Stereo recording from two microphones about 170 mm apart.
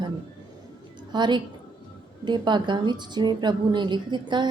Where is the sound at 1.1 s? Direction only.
25° right (ahead or behind).